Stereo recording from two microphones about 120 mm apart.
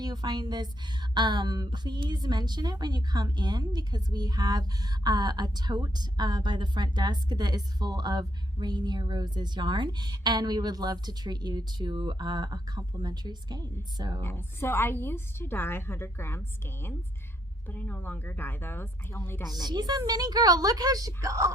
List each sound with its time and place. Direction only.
0.0 s a woman's voice: 35° right (ahead or behind)
14.2 s a woman's voice: 20° left (ahead or behind)
19.5 s a woman's voice: centre (ahead or behind)
19.7 s a woman's voice: 35° right (ahead or behind)